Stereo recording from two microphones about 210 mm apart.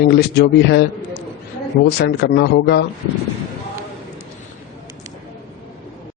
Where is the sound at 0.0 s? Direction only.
50° left (ahead or behind).